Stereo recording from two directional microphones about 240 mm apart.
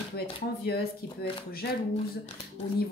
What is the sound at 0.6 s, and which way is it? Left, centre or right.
Speech, left.